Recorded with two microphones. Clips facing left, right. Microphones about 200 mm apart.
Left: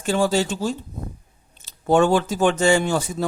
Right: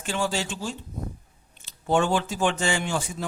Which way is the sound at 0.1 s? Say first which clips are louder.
Left 8 dB; 40° left (ahead or behind).